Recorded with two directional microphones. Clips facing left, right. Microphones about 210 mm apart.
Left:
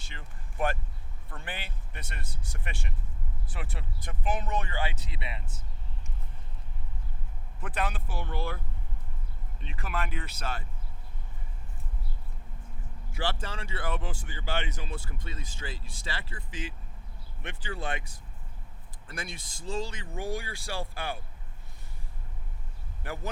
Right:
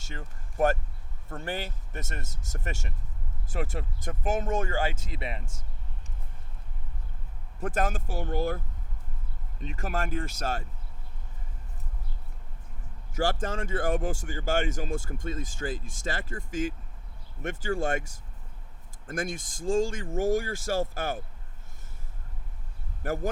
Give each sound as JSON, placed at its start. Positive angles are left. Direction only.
{"t": 0.0, "sound": "speech", "side_deg": -40}
{"t": 7.6, "sound": "speech", "side_deg": -45}
{"t": 13.4, "sound": "speech", "side_deg": -45}
{"t": 23.0, "sound": "speech", "side_deg": -45}